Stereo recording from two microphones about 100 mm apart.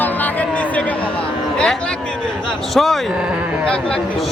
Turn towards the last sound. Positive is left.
turn(degrees=10)  # may be behind; listen again after turning